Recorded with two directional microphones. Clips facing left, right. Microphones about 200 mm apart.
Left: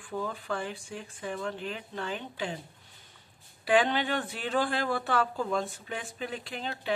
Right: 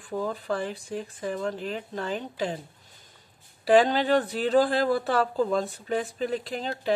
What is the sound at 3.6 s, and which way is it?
Speech, 40° right (ahead or behind).